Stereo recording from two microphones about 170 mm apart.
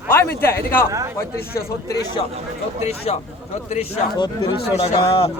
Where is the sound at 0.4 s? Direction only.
15° left (ahead or behind).